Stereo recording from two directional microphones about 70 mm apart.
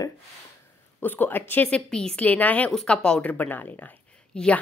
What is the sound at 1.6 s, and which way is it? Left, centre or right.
A woman's voice, centre.